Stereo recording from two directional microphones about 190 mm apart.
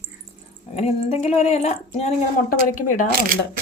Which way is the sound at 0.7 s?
35° left (ahead or behind).